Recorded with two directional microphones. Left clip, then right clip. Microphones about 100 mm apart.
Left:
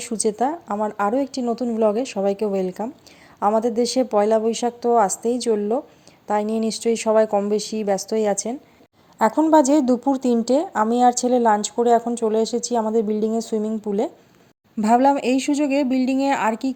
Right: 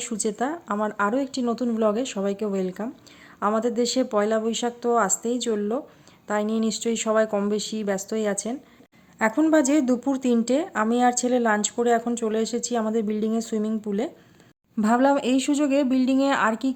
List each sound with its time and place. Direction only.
0.0 s speech: 35° left (ahead or behind)
0.7 s speech: 30° left (ahead or behind)
1.5 s a woman's voice: 20° left (ahead or behind); by 7.3 s 35° left (ahead or behind)
7.3 s a woman's voice: 20° left (ahead or behind)
7.5 s a woman's voice: 35° left (ahead or behind)
9.5 s a woman's voice: 35° left (ahead or behind)
14.8 s speech: 45° left (ahead or behind)